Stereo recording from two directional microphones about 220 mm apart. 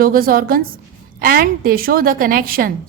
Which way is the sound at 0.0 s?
40° right (ahead or behind).